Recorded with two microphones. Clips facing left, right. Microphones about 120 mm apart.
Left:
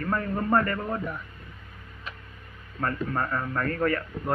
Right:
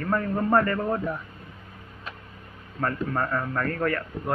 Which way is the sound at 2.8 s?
5° right (ahead or behind).